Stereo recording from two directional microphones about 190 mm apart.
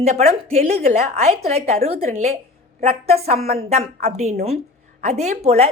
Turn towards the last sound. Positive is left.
turn(degrees=-35)  # may be behind; listen again after turning